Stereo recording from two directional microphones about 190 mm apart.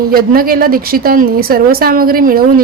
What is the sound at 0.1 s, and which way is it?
A woman's voice, 50° right (ahead or behind).